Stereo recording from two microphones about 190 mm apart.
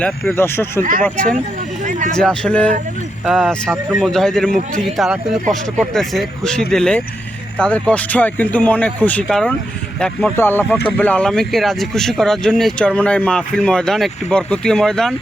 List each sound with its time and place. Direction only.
0.0 s speech: 10° left (ahead or behind)
1.8 s a sound: 40° right (ahead or behind)
2.1 s speech: 5° left (ahead or behind)